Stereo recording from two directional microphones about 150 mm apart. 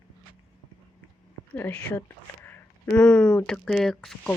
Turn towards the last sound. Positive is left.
turn(degrees=5)  # may be behind; listen again after turning